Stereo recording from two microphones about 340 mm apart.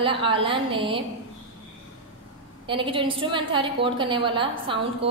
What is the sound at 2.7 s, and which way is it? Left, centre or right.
A woman's voice, centre.